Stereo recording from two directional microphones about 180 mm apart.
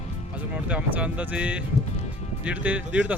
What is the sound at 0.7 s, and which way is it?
Speech, 5° right (ahead or behind).